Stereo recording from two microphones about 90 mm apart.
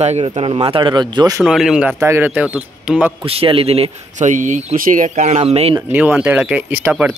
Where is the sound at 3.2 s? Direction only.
90° right.